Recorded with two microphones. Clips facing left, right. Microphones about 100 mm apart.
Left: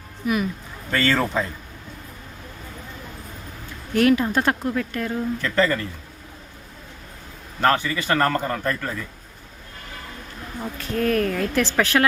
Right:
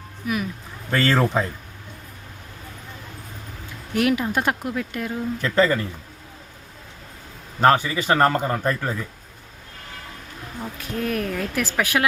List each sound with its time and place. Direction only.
0.2 s speech: centre (ahead or behind)
0.9 s speech: 25° right (ahead or behind)
3.9 s speech: 10° right (ahead or behind)
7.6 s speech: 20° right (ahead or behind)
10.8 s speech: 10° right (ahead or behind)